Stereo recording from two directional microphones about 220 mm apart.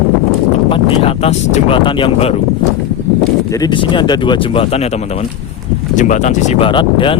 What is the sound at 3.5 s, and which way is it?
Speech, 20° left (ahead or behind).